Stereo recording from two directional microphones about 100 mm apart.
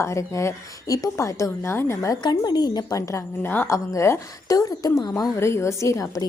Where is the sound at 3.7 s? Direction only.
30° left (ahead or behind).